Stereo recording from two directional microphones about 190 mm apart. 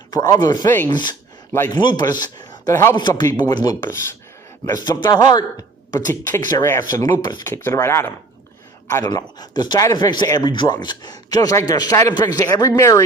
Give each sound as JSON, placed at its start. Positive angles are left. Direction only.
{"t": 0.1, "sound": "speech", "side_deg": 20}
{"t": 1.8, "sound": "speech", "side_deg": 25}